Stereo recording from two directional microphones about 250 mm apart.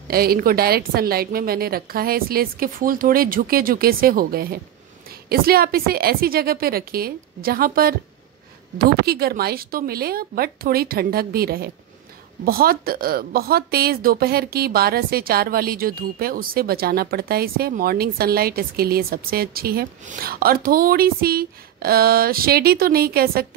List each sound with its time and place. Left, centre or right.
0.1 s speech: right